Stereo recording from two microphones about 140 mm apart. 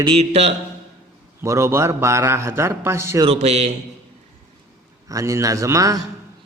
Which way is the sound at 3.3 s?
50° right (ahead or behind).